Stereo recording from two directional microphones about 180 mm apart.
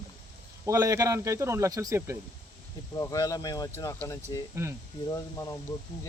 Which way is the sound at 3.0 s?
20° left (ahead or behind).